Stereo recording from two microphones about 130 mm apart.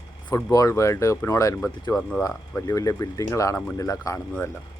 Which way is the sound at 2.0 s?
5° left (ahead or behind).